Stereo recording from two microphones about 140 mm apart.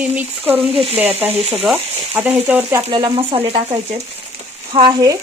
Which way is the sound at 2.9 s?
35° right (ahead or behind).